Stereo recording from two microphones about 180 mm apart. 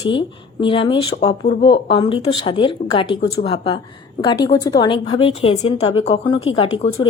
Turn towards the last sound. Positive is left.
turn(degrees=35)  # may be behind; listen again after turning